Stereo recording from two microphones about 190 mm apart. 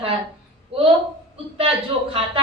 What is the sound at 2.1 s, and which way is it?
Speech, 30° right (ahead or behind).